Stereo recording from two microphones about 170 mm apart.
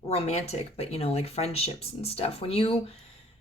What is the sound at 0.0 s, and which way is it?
Speech, 40° left (ahead or behind).